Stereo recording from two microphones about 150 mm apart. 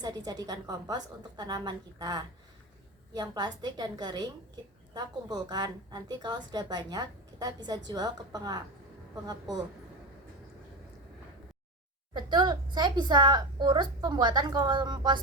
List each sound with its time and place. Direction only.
0.0 s a woman's voice: 25° right (ahead or behind)
12.1 s a woman's voice: 30° right (ahead or behind)